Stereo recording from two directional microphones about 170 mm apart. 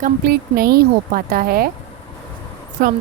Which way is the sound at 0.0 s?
60° right (ahead or behind).